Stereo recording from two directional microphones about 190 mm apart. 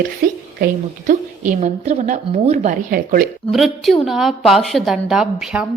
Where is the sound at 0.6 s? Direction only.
40° right (ahead or behind).